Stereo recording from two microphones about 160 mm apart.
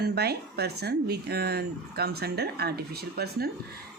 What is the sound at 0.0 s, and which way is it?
Speech, 90° right.